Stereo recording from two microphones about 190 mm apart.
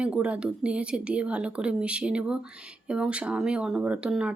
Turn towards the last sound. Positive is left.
turn(degrees=-5)  # may be behind; listen again after turning